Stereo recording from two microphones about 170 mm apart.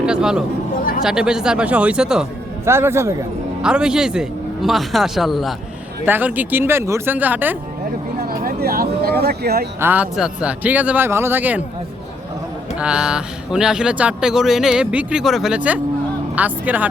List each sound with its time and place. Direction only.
0.0 s a sound: 5° right (ahead or behind)
1.0 s speech: 5° right (ahead or behind)
2.6 s speech: 15° right (ahead or behind)
3.6 s speech: 5° right (ahead or behind)
8.3 s speech: 60° right (ahead or behind)
9.8 s speech: 10° right (ahead or behind)
12.8 s speech: 5° right (ahead or behind)